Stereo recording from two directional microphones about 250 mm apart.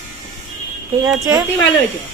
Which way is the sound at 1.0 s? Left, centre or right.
Centre.